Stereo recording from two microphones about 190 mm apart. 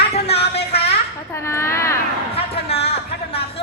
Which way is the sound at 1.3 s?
15° left (ahead or behind).